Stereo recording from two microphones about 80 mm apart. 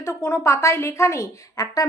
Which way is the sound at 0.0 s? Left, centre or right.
Left.